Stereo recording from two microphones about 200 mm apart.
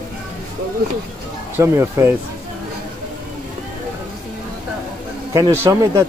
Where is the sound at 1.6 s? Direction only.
15° right (ahead or behind).